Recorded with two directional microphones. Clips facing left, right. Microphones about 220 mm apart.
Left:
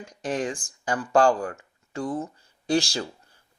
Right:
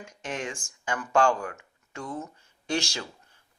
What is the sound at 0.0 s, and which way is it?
Speech, 35° left (ahead or behind).